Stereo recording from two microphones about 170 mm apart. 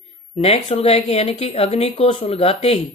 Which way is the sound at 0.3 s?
40° left (ahead or behind).